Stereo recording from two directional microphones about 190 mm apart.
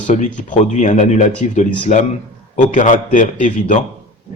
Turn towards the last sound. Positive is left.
turn(degrees=40)  # may be behind; listen again after turning